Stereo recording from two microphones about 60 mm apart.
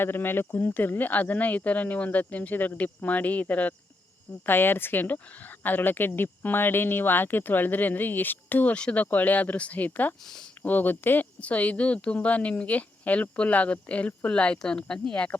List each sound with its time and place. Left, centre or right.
0.0 s a woman's voice: left
8.7 s a woman's voice: left